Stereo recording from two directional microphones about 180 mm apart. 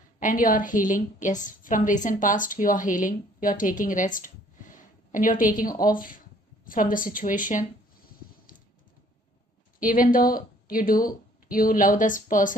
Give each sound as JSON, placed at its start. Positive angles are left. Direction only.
{"t": 0.2, "sound": "a woman's voice", "side_deg": 50}
{"t": 9.8, "sound": "a woman's voice", "side_deg": 50}